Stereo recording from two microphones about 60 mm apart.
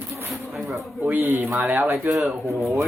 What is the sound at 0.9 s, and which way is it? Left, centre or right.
Speech, right.